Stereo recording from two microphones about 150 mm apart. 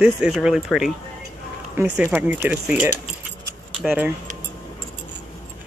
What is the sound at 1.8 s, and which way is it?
Speech, 15° right (ahead or behind).